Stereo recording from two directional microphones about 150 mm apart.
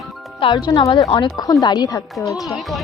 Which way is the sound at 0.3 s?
30° left (ahead or behind).